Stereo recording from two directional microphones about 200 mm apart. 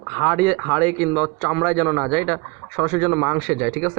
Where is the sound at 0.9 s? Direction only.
10° left (ahead or behind).